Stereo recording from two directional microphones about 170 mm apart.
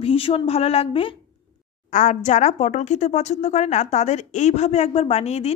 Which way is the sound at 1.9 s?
45° left (ahead or behind).